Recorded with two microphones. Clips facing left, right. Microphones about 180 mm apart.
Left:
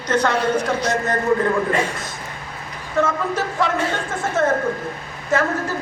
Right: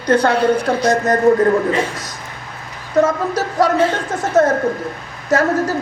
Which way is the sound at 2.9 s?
40° right (ahead or behind).